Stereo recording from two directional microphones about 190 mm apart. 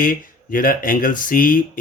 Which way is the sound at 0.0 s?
45° left (ahead or behind).